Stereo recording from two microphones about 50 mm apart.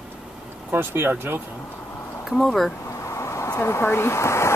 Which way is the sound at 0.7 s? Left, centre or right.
Right.